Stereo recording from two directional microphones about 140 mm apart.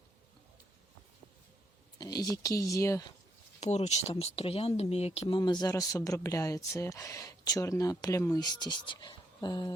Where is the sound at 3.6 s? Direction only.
50° left (ahead or behind).